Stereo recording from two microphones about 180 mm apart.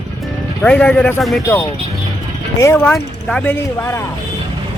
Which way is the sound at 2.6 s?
15° left (ahead or behind).